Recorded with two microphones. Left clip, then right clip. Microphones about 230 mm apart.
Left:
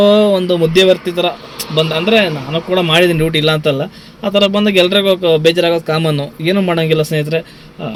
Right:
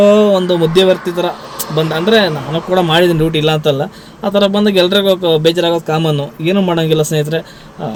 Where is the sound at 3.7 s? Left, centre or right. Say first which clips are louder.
Right 1 dB; centre.